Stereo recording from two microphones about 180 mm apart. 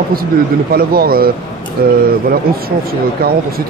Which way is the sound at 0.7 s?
55° right (ahead or behind).